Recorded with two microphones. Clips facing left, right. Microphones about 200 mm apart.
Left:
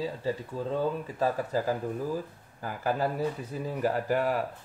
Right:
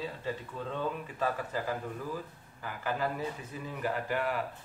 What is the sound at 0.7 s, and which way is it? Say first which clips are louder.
Speech: left 6 dB; 35° left (ahead or behind).